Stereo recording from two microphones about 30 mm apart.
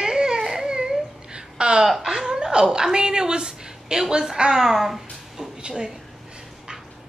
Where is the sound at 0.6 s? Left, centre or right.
Right.